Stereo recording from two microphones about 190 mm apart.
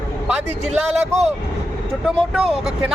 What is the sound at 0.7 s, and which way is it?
Speech, 35° right (ahead or behind).